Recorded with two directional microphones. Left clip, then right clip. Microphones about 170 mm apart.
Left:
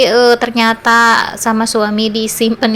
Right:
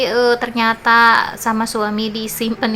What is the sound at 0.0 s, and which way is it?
A woman's voice, 25° left (ahead or behind).